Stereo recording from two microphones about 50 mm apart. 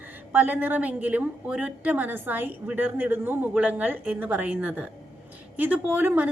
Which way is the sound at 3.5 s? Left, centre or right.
Right.